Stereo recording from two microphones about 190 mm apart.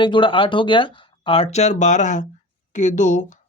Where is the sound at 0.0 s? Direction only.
25° left (ahead or behind).